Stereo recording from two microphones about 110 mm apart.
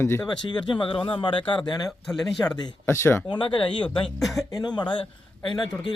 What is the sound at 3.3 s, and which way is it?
Speech, 50° left (ahead or behind).